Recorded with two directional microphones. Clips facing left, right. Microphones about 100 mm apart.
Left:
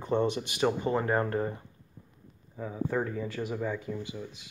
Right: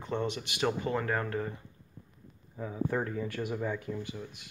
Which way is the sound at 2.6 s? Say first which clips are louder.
Left 1 dB; centre (ahead or behind).